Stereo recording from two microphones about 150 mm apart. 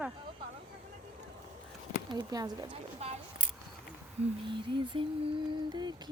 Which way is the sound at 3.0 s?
45° right (ahead or behind).